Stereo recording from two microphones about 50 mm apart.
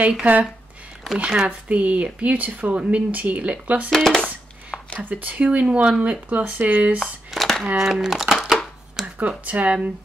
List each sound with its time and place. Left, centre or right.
0.2 s speech: right
1.1 s speech: centre
3.9 s speech: centre
4.2 s a sound: left
5.1 s speech: right
7.3 s a sound: centre
7.7 s speech: centre
9.0 s a sound: centre
9.4 s speech: right